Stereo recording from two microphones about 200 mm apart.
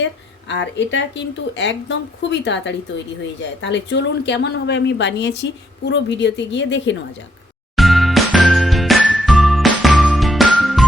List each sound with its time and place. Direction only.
0.0 s a woman's voice: 65° left (ahead or behind)
7.8 s jingle: centre (ahead or behind)